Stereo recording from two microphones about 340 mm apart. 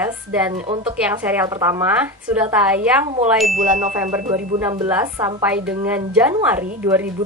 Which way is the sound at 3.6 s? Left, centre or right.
Right.